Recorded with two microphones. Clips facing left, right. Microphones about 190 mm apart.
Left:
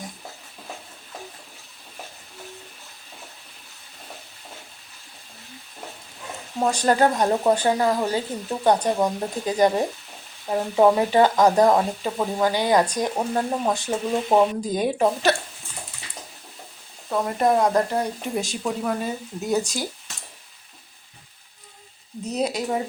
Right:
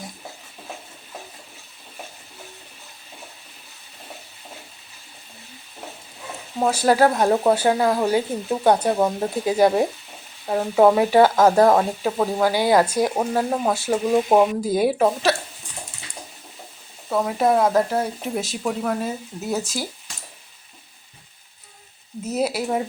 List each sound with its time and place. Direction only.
6.6 s speech: 5° right (ahead or behind)
17.1 s speech: centre (ahead or behind)
22.2 s speech: 5° right (ahead or behind)